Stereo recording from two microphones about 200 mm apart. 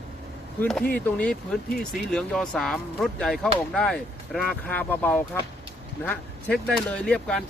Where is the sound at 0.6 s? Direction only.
10° left (ahead or behind).